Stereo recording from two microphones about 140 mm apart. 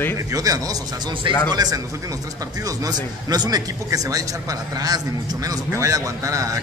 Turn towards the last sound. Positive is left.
turn(degrees=-25)  # may be behind; listen again after turning